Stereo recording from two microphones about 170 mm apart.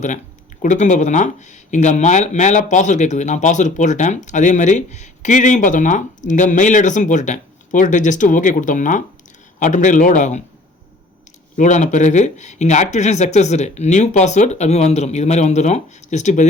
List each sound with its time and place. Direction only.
0.6 s speech: 45° left (ahead or behind)
11.5 s speech: 45° left (ahead or behind)